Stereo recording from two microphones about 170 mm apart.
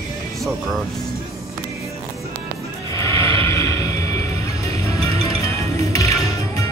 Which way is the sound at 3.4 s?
20° left (ahead or behind).